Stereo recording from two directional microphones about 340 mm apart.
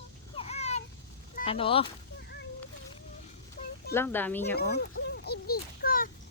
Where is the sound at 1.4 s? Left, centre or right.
Centre.